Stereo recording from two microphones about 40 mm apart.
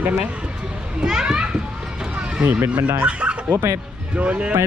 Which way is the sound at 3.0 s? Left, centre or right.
Right.